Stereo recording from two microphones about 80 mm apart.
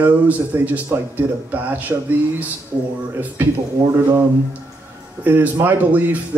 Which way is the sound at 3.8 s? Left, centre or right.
Right.